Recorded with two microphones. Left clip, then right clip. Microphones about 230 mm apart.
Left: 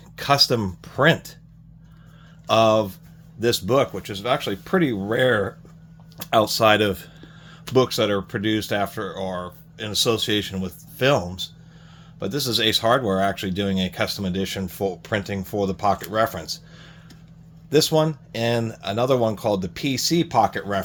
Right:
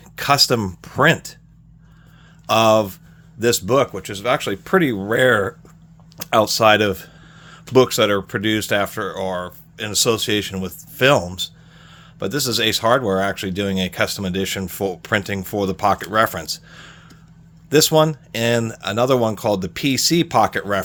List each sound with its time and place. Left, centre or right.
0.2 s speech: right
2.5 s speech: right
6.1 s a sound: right
7.7 s speech: right